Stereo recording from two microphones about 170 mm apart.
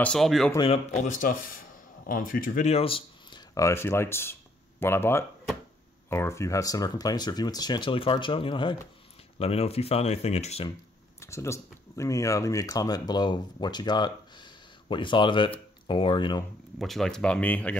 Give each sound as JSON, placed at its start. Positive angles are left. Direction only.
{"t": 0.0, "sound": "speech", "side_deg": 5}
{"t": 0.9, "sound": "speech", "side_deg": 45}
{"t": 11.1, "sound": "speech", "side_deg": 15}
{"t": 16.7, "sound": "speech", "side_deg": 0}